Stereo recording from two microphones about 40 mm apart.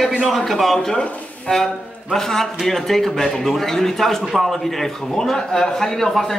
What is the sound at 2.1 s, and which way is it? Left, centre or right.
A man's voice, centre.